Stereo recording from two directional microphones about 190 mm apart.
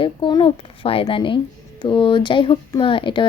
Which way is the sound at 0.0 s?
25° left (ahead or behind).